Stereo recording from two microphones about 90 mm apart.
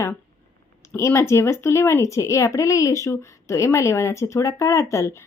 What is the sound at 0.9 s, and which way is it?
Speech, 35° left (ahead or behind).